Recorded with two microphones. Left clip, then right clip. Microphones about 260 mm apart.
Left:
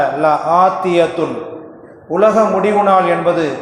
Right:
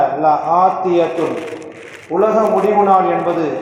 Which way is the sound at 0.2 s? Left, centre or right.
Left.